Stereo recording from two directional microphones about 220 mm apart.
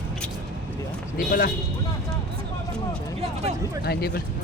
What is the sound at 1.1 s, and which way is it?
Speech, 40° left (ahead or behind).